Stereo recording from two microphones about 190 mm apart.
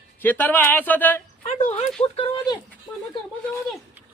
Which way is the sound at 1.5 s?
35° left (ahead or behind).